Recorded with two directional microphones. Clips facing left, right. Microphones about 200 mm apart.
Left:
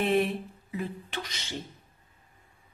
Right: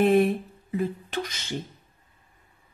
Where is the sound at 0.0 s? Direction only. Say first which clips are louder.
Right 6 dB; 45° right (ahead or behind).